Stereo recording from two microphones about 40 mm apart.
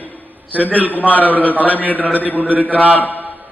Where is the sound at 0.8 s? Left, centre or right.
Left.